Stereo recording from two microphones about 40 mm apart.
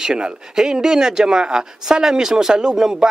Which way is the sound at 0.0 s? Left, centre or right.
Centre.